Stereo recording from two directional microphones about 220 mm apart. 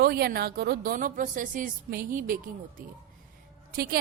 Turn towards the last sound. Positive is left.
turn(degrees=-45)  # may be behind; listen again after turning